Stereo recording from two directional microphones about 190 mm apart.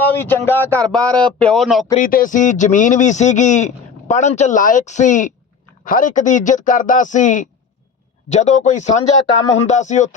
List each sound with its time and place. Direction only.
0.0 s a man's voice: 10° left (ahead or behind)
2.0 s a man's voice: 45° left (ahead or behind)